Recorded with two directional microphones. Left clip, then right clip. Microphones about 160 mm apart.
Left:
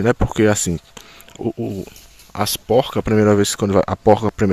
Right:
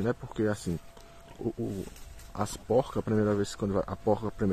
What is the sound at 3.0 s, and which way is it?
Speech, 40° left (ahead or behind).